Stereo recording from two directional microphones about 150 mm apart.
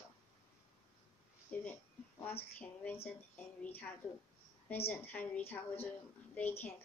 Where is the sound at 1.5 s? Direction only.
10° left (ahead or behind).